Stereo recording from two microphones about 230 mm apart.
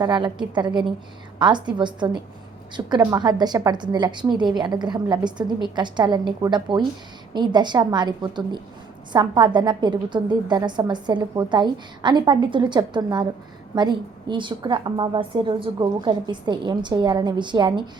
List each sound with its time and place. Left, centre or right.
0.0 s a woman's voice: centre